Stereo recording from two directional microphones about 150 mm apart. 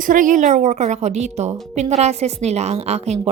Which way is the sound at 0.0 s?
60° right (ahead or behind).